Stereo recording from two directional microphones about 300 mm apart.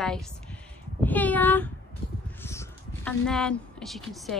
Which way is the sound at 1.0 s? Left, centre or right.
Centre.